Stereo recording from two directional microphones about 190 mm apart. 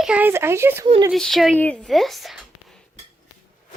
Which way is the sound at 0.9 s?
25° right (ahead or behind).